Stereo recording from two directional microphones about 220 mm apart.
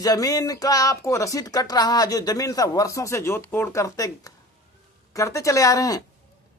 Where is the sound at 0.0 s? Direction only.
15° left (ahead or behind).